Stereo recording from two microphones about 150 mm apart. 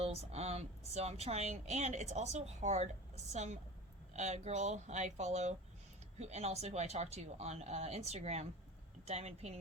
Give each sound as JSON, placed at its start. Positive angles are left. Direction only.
{"t": 0.0, "sound": "speech", "side_deg": -45}